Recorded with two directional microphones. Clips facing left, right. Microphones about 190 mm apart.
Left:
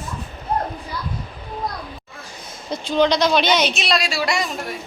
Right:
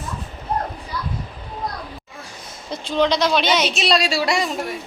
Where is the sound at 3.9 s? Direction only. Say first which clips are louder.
Right 2 dB; 35° right (ahead or behind).